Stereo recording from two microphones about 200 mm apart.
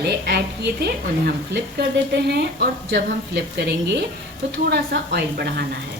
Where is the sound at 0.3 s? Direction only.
55° right (ahead or behind).